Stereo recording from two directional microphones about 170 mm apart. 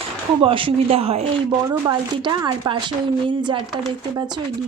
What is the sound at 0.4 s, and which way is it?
Speech, 30° right (ahead or behind).